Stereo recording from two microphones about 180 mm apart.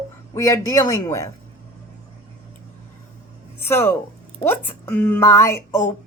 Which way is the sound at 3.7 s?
15° left (ahead or behind).